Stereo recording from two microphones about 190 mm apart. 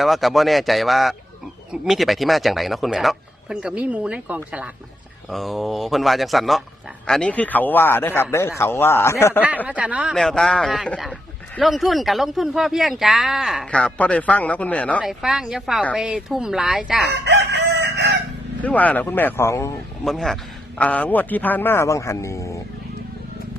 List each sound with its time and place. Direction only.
0.0 s a man's voice: centre (ahead or behind)
9.6 s speech: 5° right (ahead or behind)
17.1 s chicken: 65° right (ahead or behind)
18.6 s a man's voice: 10° left (ahead or behind)
20.1 s a man's voice: centre (ahead or behind)